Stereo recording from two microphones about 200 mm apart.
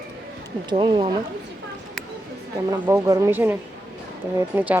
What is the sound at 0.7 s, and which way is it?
Speech, 25° right (ahead or behind).